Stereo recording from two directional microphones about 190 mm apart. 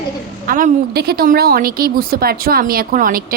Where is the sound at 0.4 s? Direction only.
45° right (ahead or behind).